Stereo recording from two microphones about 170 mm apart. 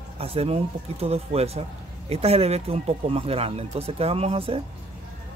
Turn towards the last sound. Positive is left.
turn(degrees=-35)  # may be behind; listen again after turning